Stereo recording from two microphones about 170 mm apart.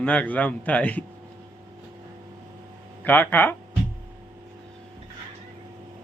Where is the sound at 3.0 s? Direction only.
10° left (ahead or behind).